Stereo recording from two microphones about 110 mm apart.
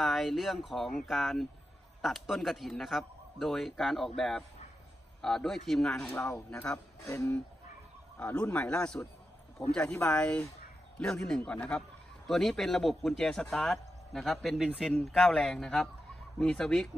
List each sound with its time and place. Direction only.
0.0 s a man's voice: centre (ahead or behind)
6.0 s speech: 25° left (ahead or behind)
8.2 s speech: 10° left (ahead or behind)
10.1 s a man's voice: 5° left (ahead or behind)